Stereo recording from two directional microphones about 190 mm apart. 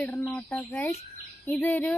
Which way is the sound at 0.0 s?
5° left (ahead or behind).